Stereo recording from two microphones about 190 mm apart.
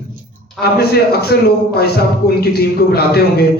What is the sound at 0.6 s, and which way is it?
Speech, 55° left (ahead or behind).